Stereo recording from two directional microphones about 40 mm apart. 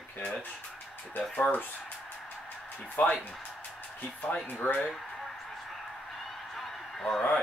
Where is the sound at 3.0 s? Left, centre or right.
Left.